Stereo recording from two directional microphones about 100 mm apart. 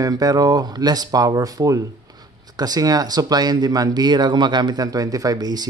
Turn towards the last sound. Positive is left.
turn(degrees=-40)  # may be behind; listen again after turning